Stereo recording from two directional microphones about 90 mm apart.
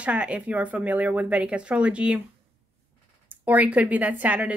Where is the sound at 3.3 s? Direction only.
20° right (ahead or behind).